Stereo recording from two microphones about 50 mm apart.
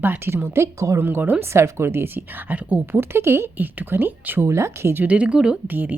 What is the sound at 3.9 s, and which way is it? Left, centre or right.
Speech, right.